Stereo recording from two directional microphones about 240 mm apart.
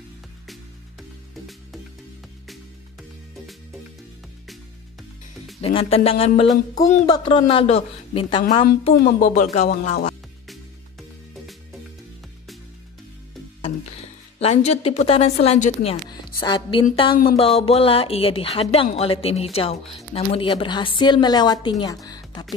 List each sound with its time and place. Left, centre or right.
2.4 s music: centre
5.8 s a woman's voice: left
8.9 s a woman's voice: left
10.5 s music: centre
14.4 s a woman's voice: left